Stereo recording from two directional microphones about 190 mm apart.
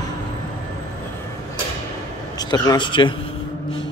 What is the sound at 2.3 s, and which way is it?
Speech, 20° left (ahead or behind).